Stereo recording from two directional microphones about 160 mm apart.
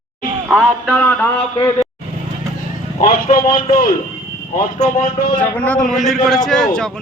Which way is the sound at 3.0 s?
60° left (ahead or behind).